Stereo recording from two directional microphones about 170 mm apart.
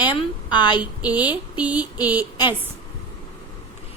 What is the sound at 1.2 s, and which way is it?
Speech, 10° right (ahead or behind).